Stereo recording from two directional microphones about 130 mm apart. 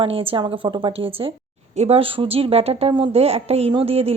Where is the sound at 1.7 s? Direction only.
55° right (ahead or behind).